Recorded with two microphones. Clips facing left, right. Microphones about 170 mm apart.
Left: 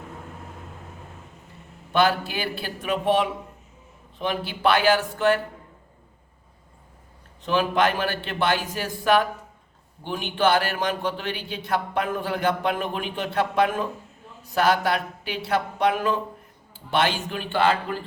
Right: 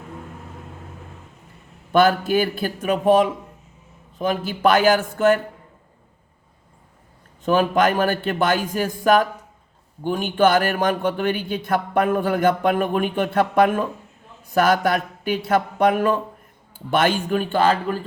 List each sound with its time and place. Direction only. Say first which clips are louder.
1.9 s speech: right 5 dB; 45° right (ahead or behind)
7.4 s speech: right 4 dB; 45° right (ahead or behind)